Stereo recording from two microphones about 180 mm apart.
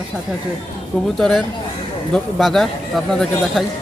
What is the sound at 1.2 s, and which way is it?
Speech, centre (ahead or behind).